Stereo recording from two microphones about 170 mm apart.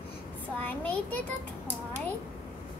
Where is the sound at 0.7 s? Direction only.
10° left (ahead or behind).